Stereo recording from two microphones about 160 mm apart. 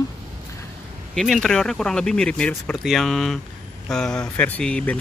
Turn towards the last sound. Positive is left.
turn(degrees=5)  # may be behind; listen again after turning